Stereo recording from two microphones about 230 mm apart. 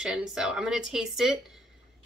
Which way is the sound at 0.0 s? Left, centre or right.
Centre.